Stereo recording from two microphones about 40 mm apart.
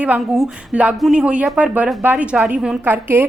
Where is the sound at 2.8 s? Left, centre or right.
Right.